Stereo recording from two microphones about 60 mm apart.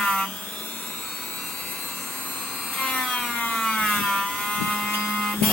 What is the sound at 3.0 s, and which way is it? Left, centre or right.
Wood, centre.